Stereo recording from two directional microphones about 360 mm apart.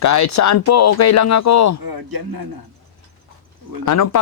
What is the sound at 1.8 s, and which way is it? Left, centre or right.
Speech, right.